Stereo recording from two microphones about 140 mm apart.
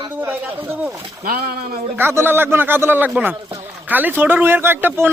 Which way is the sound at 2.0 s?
15° right (ahead or behind).